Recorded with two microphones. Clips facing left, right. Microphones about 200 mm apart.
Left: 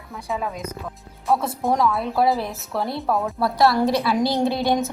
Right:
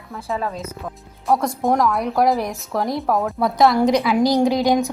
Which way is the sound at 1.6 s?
15° right (ahead or behind).